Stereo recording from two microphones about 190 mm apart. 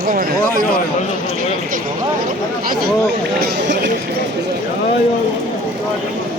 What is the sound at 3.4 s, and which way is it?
Speech, 55° right (ahead or behind).